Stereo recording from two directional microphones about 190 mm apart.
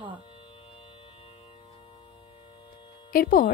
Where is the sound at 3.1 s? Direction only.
50° left (ahead or behind).